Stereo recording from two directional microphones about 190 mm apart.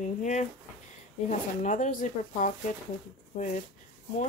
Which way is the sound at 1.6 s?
40° left (ahead or behind).